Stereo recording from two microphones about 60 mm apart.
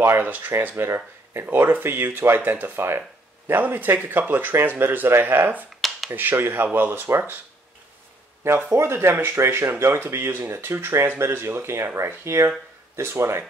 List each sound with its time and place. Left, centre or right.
0.0 s speech: right
8.6 s speech: right